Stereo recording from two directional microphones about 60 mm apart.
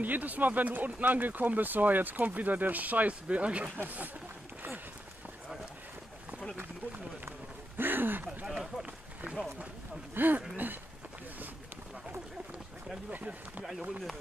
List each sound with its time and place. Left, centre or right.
0.0 s speech: right
3.7 s speech: right
7.2 s run: right
8.5 s speech: centre
10.1 s speech: right
13.1 s speech: right
13.7 s speech: centre